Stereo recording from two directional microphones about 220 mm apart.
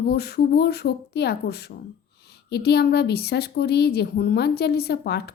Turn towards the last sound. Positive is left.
turn(degrees=50)  # may be behind; listen again after turning